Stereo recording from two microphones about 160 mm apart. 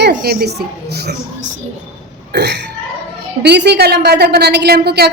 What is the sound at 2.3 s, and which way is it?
A woman's voice, 90° right.